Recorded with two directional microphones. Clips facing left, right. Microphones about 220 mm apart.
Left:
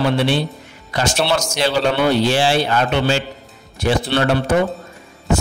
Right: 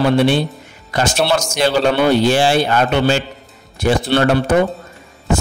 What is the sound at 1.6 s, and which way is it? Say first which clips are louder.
A man's voice: right 3 dB; 50° right (ahead or behind).